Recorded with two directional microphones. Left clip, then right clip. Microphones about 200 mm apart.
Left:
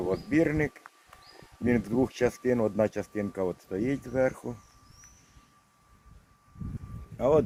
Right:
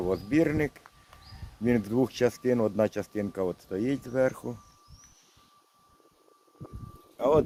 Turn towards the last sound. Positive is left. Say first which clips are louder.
# even
turn(degrees=0)  # may be behind; listen again after turning